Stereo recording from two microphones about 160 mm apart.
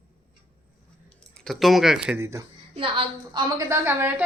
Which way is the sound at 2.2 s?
20° right (ahead or behind).